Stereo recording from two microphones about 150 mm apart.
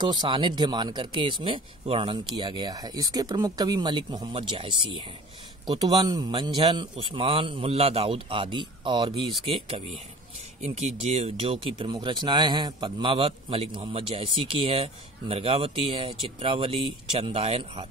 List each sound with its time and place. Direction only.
0.0 s speech: 30° right (ahead or behind)